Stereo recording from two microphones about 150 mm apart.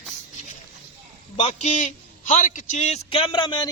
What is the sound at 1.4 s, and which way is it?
A man's voice, 40° left (ahead or behind).